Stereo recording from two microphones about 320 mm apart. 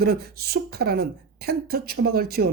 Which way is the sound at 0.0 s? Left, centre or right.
Right.